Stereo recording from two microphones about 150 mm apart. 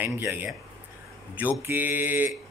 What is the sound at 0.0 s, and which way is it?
Speech, 15° right (ahead or behind).